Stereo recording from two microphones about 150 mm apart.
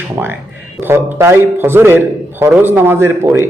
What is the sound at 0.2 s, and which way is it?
A man's voice, 15° right (ahead or behind).